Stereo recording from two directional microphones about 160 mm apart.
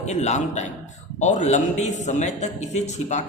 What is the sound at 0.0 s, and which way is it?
A man's voice, 45° left (ahead or behind).